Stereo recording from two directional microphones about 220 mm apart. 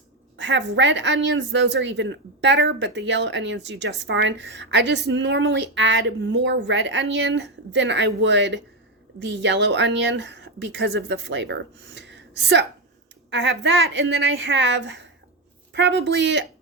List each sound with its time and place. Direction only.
0.3 s a woman's voice: 55° right (ahead or behind)